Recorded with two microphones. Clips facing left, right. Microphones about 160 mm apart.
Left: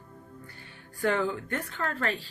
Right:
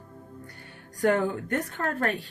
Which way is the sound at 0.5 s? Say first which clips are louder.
Right 3 dB; 55° right (ahead or behind).